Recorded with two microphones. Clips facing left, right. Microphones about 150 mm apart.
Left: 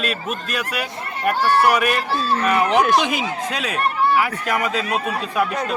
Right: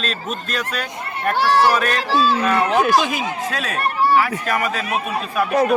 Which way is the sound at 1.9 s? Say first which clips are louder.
Right 3 dB; 90° right.